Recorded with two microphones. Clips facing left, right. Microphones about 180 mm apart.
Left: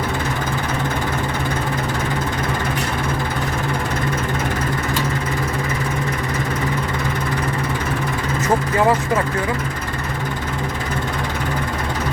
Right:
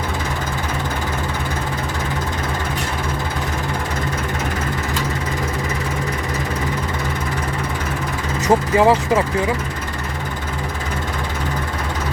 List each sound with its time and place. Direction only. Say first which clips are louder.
8.4 s speech: right 3 dB; 15° right (ahead or behind)